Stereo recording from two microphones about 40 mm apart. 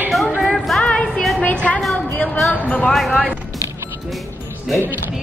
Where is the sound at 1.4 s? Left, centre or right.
Left.